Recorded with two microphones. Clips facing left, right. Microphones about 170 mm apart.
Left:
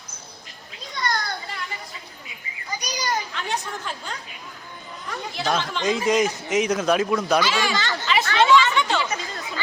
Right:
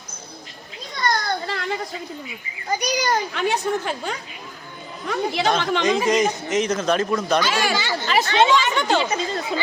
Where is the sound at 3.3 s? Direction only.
65° right (ahead or behind).